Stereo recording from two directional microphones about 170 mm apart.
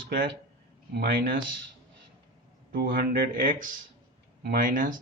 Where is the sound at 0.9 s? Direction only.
70° right (ahead or behind).